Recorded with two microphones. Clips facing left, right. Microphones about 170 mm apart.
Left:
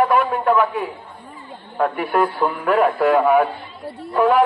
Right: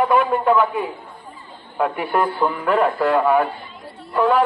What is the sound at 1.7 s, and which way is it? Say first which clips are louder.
A man's voice: left 1 dB; centre (ahead or behind).